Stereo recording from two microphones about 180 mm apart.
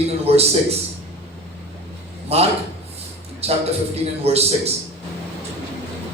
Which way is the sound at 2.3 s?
35° right (ahead or behind).